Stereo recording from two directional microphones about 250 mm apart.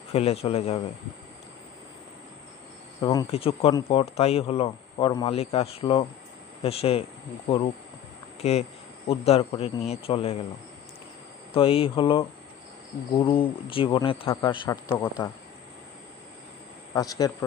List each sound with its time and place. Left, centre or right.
0.1 s speech: left
3.0 s speech: centre
11.5 s speech: left
16.9 s a man's voice: centre